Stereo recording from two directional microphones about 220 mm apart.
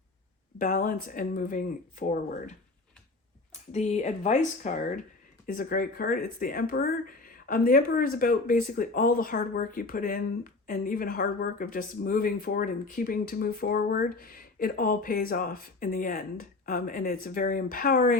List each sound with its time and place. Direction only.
0.6 s speech: 35° left (ahead or behind)